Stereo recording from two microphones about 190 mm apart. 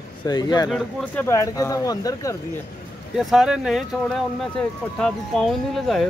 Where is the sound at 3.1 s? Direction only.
Centre (ahead or behind).